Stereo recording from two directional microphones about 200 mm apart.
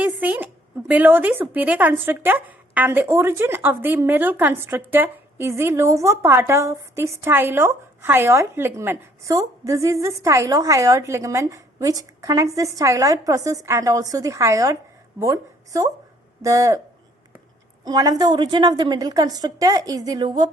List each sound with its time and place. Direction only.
0.0 s a woman's voice: 10° right (ahead or behind)
17.8 s a woman's voice: 20° right (ahead or behind)